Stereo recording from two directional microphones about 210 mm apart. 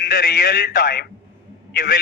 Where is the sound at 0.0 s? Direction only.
45° left (ahead or behind).